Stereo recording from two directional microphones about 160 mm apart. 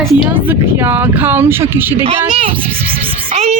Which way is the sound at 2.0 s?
35° right (ahead or behind).